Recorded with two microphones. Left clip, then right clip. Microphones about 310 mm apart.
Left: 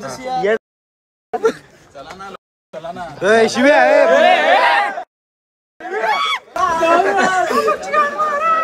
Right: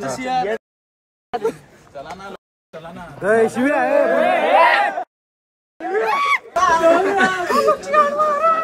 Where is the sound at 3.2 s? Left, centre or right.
Left.